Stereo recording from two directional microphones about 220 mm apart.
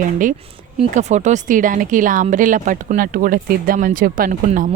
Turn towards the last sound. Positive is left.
turn(degrees=-35)  # may be behind; listen again after turning